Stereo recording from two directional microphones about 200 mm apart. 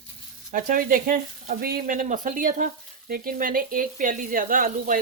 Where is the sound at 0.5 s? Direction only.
40° right (ahead or behind).